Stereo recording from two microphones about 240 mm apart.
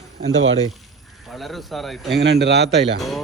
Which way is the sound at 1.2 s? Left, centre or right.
Centre.